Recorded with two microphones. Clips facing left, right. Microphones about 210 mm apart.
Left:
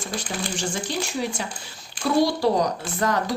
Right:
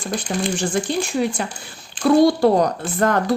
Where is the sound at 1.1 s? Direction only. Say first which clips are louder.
Right 6 dB; 60° right (ahead or behind).